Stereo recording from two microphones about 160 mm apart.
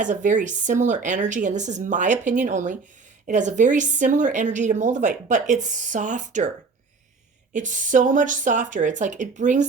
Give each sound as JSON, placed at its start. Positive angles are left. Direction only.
{"t": 0.0, "sound": "a woman's voice", "side_deg": -50}
{"t": 7.5, "sound": "a woman's voice", "side_deg": -55}